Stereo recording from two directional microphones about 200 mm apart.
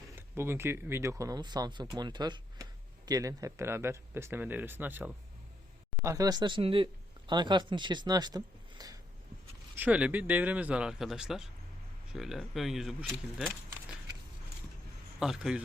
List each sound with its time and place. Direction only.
0.2 s speech: 10° right (ahead or behind)
9.7 s speech: 5° right (ahead or behind)
15.2 s speech: 5° right (ahead or behind)